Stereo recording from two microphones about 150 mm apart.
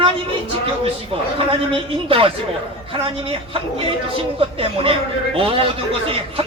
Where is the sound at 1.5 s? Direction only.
35° right (ahead or behind).